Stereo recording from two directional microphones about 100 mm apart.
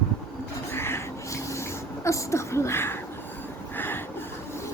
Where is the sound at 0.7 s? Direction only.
25° left (ahead or behind).